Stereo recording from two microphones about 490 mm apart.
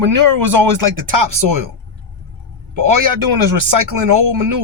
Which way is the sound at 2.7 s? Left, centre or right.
Right.